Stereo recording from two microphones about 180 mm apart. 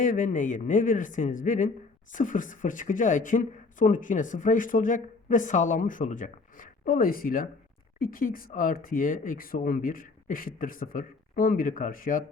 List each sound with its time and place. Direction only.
0.0 s speech: 45° left (ahead or behind)